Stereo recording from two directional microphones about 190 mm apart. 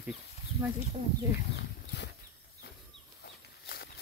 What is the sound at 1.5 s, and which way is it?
Horse, 65° left (ahead or behind).